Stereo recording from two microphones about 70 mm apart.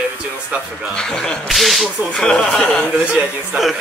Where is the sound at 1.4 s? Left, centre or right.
Centre.